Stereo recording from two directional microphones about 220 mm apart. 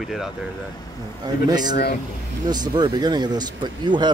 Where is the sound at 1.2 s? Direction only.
20° right (ahead or behind).